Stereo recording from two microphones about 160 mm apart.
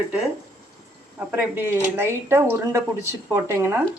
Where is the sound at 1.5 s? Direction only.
15° right (ahead or behind).